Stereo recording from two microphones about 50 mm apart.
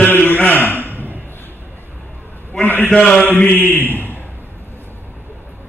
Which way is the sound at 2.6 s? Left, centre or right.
Left.